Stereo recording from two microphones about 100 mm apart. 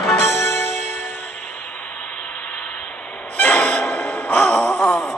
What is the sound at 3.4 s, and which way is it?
Gasp, 15° left (ahead or behind).